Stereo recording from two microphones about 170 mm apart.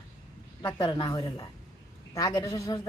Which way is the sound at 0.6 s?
25° left (ahead or behind).